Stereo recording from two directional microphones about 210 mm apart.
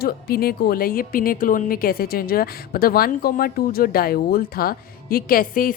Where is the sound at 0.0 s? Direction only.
45° left (ahead or behind).